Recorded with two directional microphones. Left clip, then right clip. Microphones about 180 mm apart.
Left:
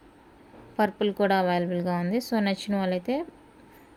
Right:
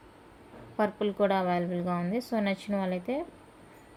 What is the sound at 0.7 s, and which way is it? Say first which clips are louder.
A woman's voice: left 3 dB; 45° left (ahead or behind).